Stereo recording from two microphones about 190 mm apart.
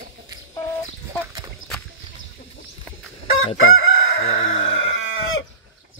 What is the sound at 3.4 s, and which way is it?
Chicken, 90° left.